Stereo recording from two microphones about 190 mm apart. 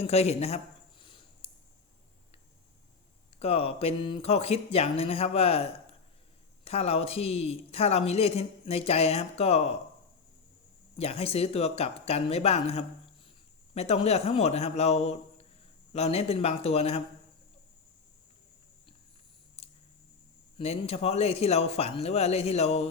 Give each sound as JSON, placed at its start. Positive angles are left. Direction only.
{"t": 0.0, "sound": "a sound", "side_deg": 35}
{"t": 3.3, "sound": "a woman's voice", "side_deg": 30}
{"t": 10.9, "sound": "a woman's voice", "side_deg": 30}
{"t": 20.6, "sound": "a woman's voice", "side_deg": 35}